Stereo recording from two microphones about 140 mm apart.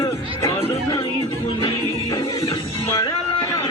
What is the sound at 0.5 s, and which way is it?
Music, 40° left (ahead or behind).